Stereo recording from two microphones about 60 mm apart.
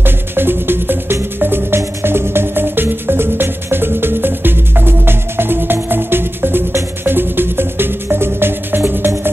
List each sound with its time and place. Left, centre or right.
0.0 s music: right